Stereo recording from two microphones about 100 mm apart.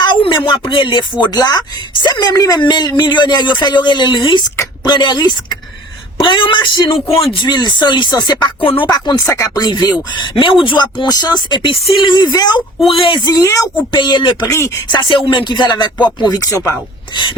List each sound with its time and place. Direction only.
0.0 s speech: 55° left (ahead or behind)
2.3 s a man's voice: 40° left (ahead or behind); by 7.3 s 75° left (ahead or behind)
7.4 s speech: 45° left (ahead or behind)
9.3 s speech: 30° left (ahead or behind)
9.6 s speech: 45° left (ahead or behind)
10.2 s speech: 60° left (ahead or behind)
11.7 s a man's voice: 65° left (ahead or behind)
12.1 s speech: 40° left (ahead or behind)
12.9 s speech: 60° left (ahead or behind)
13.4 s speech: 35° left (ahead or behind)
13.9 s speech: 50° left (ahead or behind)
14.4 s speech: 30° left (ahead or behind)
14.8 s speech: 55° left (ahead or behind); by 16.7 s 35° left (ahead or behind)